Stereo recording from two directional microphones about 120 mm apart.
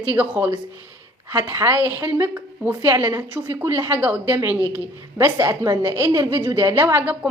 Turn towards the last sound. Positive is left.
turn(degrees=-10)  # may be behind; listen again after turning